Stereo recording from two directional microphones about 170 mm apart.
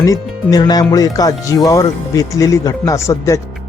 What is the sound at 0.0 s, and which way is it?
Speech, 20° left (ahead or behind).